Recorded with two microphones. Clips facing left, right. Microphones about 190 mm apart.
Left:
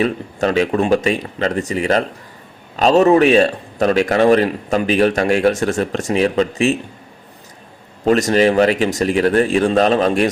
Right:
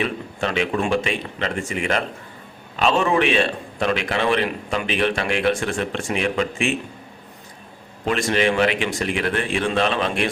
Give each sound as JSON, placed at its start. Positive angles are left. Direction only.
{"t": 0.0, "sound": "a man's voice", "side_deg": 40}
{"t": 8.0, "sound": "a man's voice", "side_deg": 40}